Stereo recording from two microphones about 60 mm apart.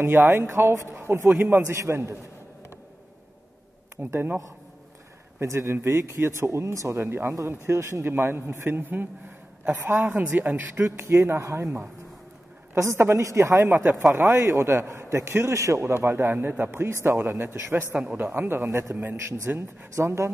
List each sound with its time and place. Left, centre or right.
0.0 s speech: right
1.4 s a man's voice: right
1.8 s speech: right
4.1 s a man's voice: right
5.4 s speech: right
7.0 s a man's voice: right
13.2 s a man's voice: right
18.7 s speech: right
19.5 s a man's voice: right
20.0 s speech: right